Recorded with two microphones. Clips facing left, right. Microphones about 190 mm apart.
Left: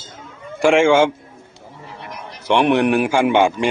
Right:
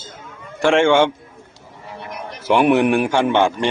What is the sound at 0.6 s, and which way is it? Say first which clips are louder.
Speech: left 1 dB; 5° left (ahead or behind).